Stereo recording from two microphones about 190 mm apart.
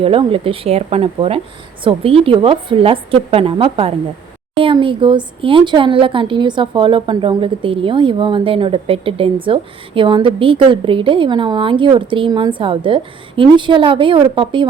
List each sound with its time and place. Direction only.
0.0 s speech: 30° right (ahead or behind)